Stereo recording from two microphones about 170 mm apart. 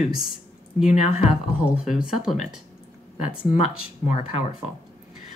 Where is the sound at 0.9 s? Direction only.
45° left (ahead or behind).